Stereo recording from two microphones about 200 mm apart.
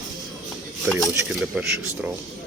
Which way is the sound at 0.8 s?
Centre (ahead or behind).